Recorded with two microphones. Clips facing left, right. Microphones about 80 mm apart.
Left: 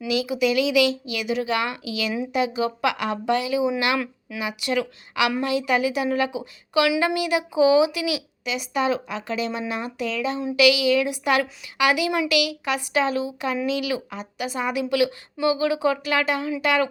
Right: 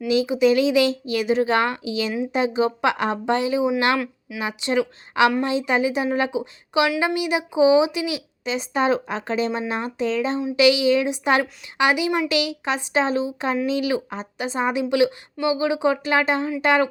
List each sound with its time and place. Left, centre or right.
0.1 s a woman's voice: right
3.9 s speech: centre
4.4 s a woman's voice: right